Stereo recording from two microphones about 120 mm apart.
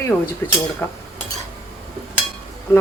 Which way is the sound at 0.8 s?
20° left (ahead or behind).